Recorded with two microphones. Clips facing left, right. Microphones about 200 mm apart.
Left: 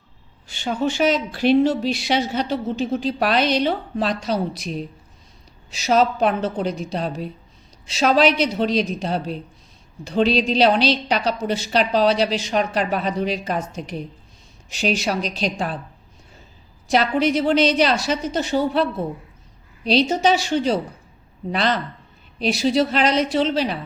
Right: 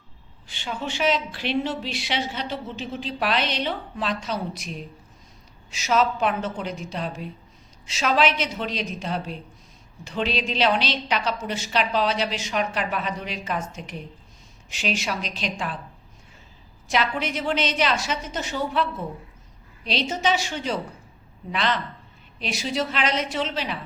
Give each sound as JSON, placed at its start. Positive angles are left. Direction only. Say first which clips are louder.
{"t": 0.4, "sound": "a woman's voice", "louder": "left 9 dB", "side_deg": 45}
{"t": 5.7, "sound": "a woman's voice", "louder": "left 4 dB", "side_deg": 35}
{"t": 16.9, "sound": "a woman's voice", "louder": "left 7 dB", "side_deg": 35}